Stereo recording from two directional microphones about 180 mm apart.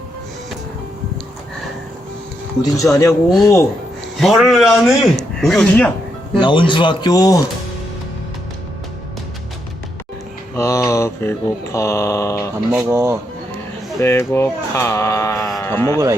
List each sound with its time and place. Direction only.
2.9 s speech: 15° left (ahead or behind)
4.2 s speech: centre (ahead or behind)
6.4 s speech: 25° left (ahead or behind)
10.5 s speech: 15° left (ahead or behind)
12.7 s speech: 15° right (ahead or behind)
14.0 s speech: 15° left (ahead or behind)